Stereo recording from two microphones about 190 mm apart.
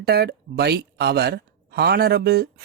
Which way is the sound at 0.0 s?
55° right (ahead or behind).